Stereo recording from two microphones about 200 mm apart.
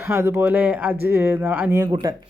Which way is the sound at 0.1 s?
10° right (ahead or behind).